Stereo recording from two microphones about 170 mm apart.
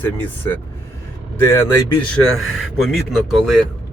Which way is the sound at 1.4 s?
15° left (ahead or behind).